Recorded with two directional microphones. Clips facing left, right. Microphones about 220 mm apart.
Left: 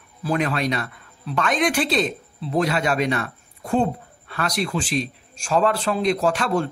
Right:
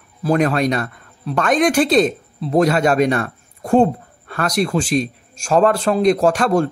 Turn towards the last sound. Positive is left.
turn(degrees=-45)  # may be behind; listen again after turning